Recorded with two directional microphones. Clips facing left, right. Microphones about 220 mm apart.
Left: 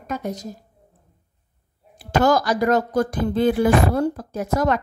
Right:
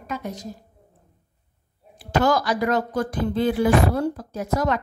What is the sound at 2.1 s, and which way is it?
Speech, 45° left (ahead or behind).